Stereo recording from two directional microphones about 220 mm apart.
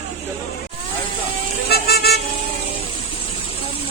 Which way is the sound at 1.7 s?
45° left (ahead or behind).